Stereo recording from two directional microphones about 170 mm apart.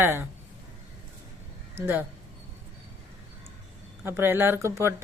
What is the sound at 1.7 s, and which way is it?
Speech, 15° right (ahead or behind).